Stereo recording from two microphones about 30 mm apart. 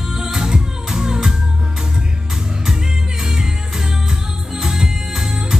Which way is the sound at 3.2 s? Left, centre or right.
Right.